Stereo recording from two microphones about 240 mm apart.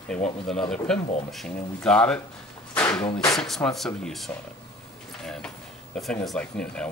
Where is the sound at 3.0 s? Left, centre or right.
Left.